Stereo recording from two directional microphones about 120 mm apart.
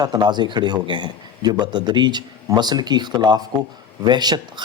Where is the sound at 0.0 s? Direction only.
35° right (ahead or behind).